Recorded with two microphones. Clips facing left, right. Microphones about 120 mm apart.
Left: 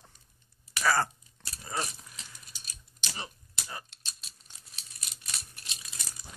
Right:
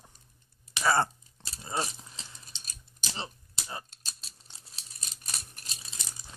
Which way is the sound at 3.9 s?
40° right (ahead or behind).